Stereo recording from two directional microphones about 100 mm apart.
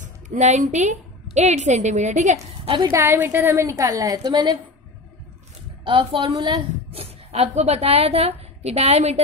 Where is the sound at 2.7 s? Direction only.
55° right (ahead or behind).